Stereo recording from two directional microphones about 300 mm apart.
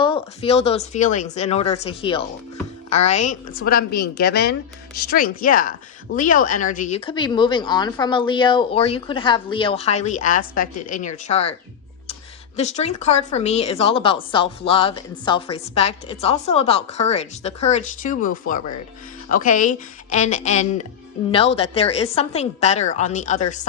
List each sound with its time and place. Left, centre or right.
0.0 s a woman's voice: centre
12.5 s speech: left